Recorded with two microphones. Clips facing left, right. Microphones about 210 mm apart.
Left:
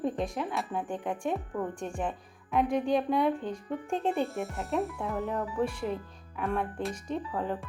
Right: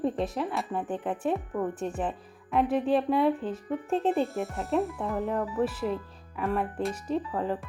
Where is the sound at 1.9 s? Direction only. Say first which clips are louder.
Right 2 dB; 5° right (ahead or behind).